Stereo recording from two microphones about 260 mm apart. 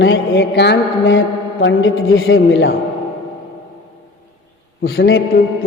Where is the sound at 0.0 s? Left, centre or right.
Left.